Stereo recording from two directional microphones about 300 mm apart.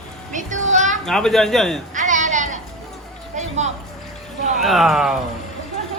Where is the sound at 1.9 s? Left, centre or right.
Right.